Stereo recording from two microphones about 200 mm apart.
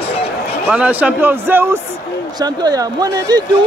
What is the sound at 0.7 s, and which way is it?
A man's voice, 5° right (ahead or behind).